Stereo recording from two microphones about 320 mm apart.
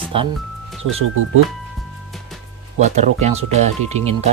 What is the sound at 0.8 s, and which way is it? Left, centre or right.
Speech, right.